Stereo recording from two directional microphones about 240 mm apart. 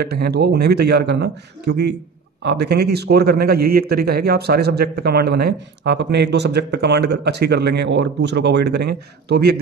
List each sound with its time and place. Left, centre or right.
0.0 s speech: right